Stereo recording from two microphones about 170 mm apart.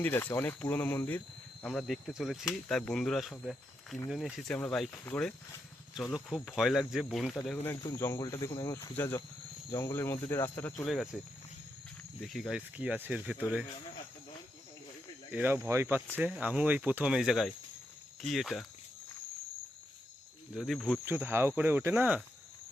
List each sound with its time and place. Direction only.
0.0 s speech: 10° left (ahead or behind)
5.9 s speech: centre (ahead or behind)
10.8 s speech: centre (ahead or behind)
12.2 s speech: centre (ahead or behind)
15.3 s speech: 10° right (ahead or behind)
20.5 s speech: centre (ahead or behind)